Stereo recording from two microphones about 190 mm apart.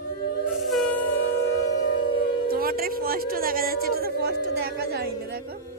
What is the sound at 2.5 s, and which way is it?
Music, 50° right (ahead or behind).